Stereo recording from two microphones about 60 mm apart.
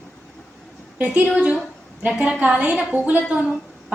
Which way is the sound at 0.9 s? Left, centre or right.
Right.